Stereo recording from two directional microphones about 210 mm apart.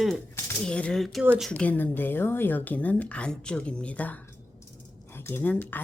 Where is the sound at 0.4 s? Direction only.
5° left (ahead or behind).